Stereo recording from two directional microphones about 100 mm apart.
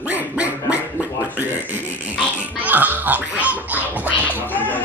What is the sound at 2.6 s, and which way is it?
Music, 15° right (ahead or behind).